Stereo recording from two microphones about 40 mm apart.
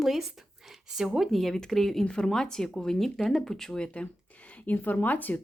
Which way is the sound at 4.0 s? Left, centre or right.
Left.